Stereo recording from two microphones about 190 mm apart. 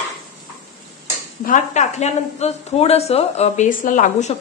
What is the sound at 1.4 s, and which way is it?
Speech, 35° left (ahead or behind).